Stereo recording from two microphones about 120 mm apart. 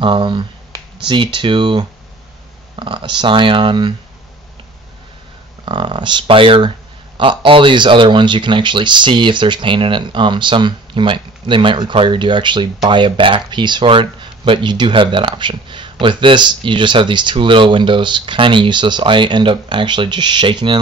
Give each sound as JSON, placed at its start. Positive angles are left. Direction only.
{"t": 0.0, "sound": "speech", "side_deg": -45}
{"t": 5.7, "sound": "speech", "side_deg": -40}